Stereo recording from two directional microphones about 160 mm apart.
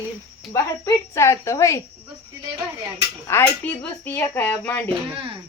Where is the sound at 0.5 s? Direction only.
15° left (ahead or behind).